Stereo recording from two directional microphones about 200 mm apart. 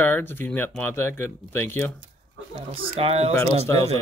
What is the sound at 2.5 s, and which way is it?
Speech, 30° right (ahead or behind).